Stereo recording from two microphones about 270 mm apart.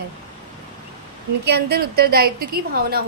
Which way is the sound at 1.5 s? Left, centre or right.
Right.